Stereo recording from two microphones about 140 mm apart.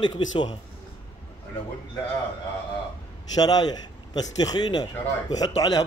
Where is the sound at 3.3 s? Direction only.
30° left (ahead or behind).